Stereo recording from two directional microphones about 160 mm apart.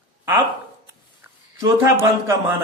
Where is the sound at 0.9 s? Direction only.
15° right (ahead or behind).